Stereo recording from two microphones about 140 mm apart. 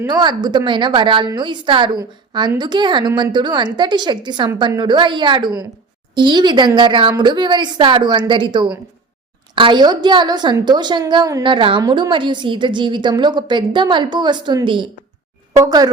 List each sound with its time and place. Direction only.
0.1 s a woman's voice: 30° right (ahead or behind)
11.5 s a woman's voice: 35° right (ahead or behind)